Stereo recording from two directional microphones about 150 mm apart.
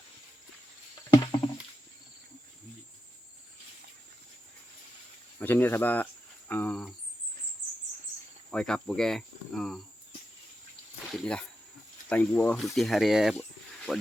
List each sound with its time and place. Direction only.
1.1 s a sound: 25° left (ahead or behind)
5.4 s speech: 15° left (ahead or behind)
8.4 s speech: 5° left (ahead or behind)
11.1 s speech: 5° left (ahead or behind)